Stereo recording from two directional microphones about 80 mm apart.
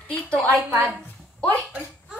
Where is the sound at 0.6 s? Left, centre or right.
Right.